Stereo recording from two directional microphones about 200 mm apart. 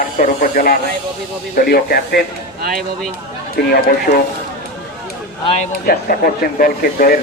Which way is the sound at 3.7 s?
50° left (ahead or behind).